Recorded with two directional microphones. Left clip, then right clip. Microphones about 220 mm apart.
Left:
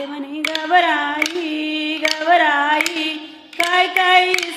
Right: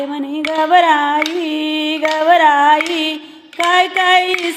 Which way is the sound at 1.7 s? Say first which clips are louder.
Right 3 dB; 40° right (ahead or behind).